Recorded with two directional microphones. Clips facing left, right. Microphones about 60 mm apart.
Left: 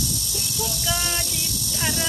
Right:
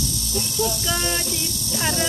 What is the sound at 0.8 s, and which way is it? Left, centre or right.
Speech, centre.